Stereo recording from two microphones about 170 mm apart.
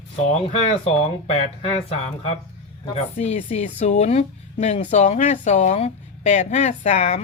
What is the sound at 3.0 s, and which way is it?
Speech, 40° left (ahead or behind).